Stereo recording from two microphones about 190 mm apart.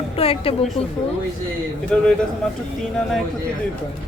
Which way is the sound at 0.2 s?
30° left (ahead or behind).